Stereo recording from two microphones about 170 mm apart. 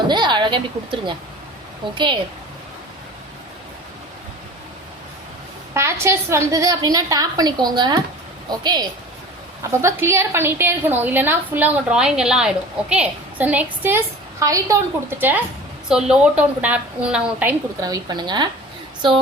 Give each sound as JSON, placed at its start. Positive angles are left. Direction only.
{"t": 0.1, "sound": "a woman's voice", "side_deg": -25}
{"t": 5.7, "sound": "a woman's voice", "side_deg": -15}
{"t": 17.7, "sound": "a woman's voice", "side_deg": -20}